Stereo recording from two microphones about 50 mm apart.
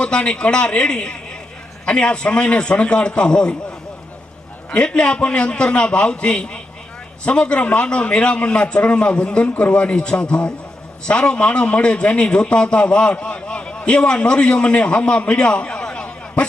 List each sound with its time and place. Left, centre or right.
0.0 s a man's voice: centre
4.7 s a man's voice: centre